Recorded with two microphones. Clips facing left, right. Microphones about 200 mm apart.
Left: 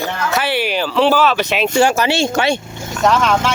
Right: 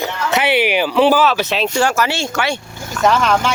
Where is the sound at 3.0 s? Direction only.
Centre (ahead or behind).